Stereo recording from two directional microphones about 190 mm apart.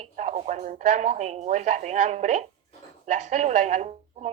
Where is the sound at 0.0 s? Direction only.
40° right (ahead or behind).